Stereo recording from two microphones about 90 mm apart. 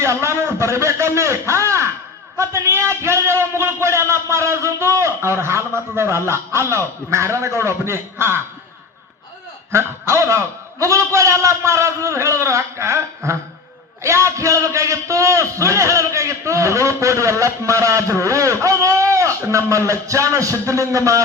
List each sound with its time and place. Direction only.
0.0 s a man's voice: 30° right (ahead or behind)
9.7 s a man's voice: 30° right (ahead or behind)